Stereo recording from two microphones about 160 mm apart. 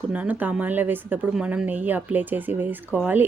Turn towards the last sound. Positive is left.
turn(degrees=-10)  # may be behind; listen again after turning